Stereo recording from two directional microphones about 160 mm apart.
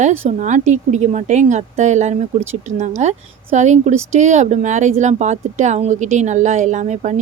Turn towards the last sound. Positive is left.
turn(degrees=-50)  # may be behind; listen again after turning